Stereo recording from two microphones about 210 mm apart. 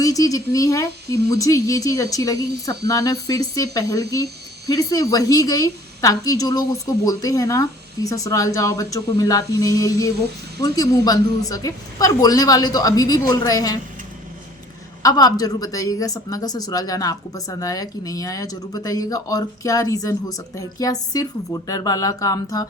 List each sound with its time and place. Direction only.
0.0 s speech: 15° left (ahead or behind)
15.0 s speech: 15° left (ahead or behind)